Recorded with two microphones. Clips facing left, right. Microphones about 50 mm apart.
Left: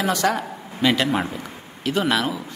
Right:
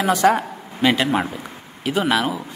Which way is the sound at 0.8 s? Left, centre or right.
Centre.